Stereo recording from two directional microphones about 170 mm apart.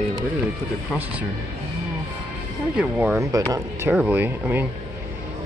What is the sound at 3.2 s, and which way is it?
Speech, 20° right (ahead or behind).